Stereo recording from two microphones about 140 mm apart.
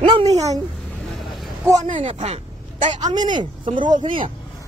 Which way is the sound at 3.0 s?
30° right (ahead or behind).